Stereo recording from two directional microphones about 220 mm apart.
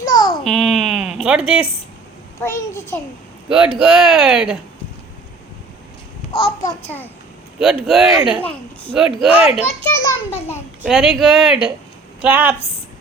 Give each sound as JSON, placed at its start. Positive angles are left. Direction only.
{"t": 0.0, "sound": "babbling", "side_deg": 20}
{"t": 0.4, "sound": "a sound", "side_deg": 0}
{"t": 2.4, "sound": "a child's voice", "side_deg": 10}
{"t": 3.8, "sound": "speech", "side_deg": -5}
{"t": 6.3, "sound": "a child's voice", "side_deg": 25}
{"t": 7.6, "sound": "a woman's voice", "side_deg": 0}
{"t": 8.9, "sound": "speech", "side_deg": -5}
{"t": 9.4, "sound": "a child's voice", "side_deg": 25}
{"t": 9.9, "sound": "a child's voice", "side_deg": 15}
{"t": 10.8, "sound": "a woman's voice", "side_deg": 0}